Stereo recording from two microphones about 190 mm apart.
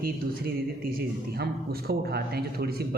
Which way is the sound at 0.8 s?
50° right (ahead or behind).